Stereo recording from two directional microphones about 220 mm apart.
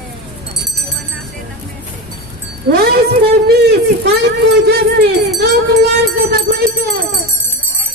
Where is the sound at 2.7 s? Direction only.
45° right (ahead or behind).